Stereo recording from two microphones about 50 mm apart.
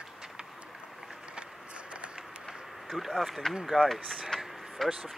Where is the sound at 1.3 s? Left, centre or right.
Right.